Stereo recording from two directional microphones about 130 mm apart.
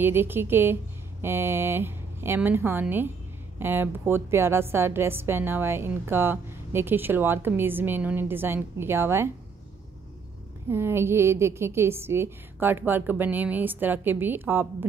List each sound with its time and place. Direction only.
0.0 s a woman's voice: 15° right (ahead or behind)
10.7 s a woman's voice: 20° right (ahead or behind)